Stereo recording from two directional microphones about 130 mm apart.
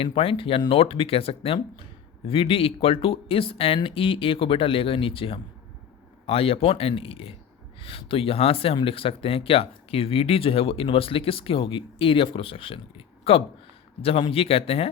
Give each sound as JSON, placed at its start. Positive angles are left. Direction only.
{"t": 0.0, "sound": "speech", "side_deg": 45}
{"t": 14.0, "sound": "speech", "side_deg": 45}